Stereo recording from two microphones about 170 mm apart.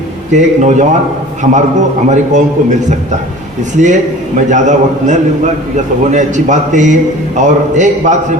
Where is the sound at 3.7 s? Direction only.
45° right (ahead or behind).